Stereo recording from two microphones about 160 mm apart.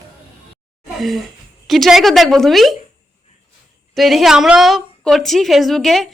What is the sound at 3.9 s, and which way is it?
A woman's voice, centre (ahead or behind).